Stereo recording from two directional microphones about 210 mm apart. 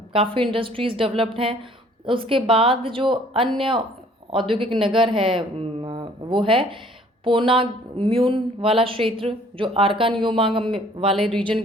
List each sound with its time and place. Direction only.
0.1 s a woman's voice: 25° right (ahead or behind)
11.1 s speech: centre (ahead or behind)